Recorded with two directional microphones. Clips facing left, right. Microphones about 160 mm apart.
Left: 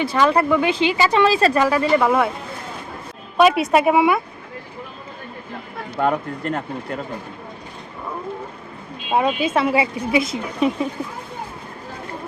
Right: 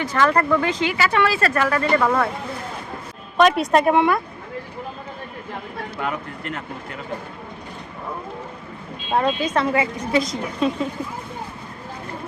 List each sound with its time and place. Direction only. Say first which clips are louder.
0.1 s speech: even; 15° left (ahead or behind)
3.3 s speech: left 1 dB; 5° left (ahead or behind)
6.0 s speech: left 8 dB; 40° left (ahead or behind)
9.0 s speech: left 2 dB; 10° left (ahead or behind)